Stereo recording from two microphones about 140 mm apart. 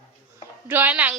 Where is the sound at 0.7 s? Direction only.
10° right (ahead or behind).